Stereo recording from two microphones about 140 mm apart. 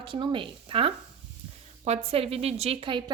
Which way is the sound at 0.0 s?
35° right (ahead or behind).